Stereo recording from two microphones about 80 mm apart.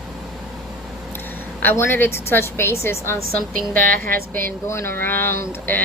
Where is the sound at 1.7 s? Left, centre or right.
Left.